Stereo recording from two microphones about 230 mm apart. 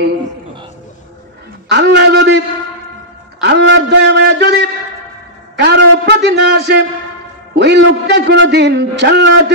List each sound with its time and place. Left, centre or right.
1.7 s a man's voice: right